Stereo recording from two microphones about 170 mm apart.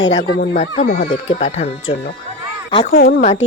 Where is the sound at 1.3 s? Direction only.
40° left (ahead or behind).